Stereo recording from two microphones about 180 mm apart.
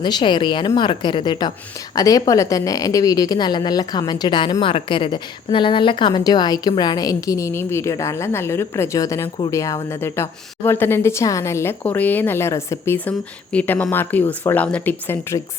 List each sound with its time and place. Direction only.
0.0 s a woman's voice: 25° left (ahead or behind)